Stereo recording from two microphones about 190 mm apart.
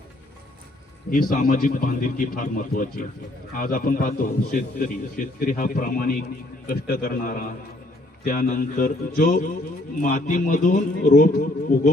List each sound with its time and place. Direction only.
1.1 s a man's voice: 45° left (ahead or behind)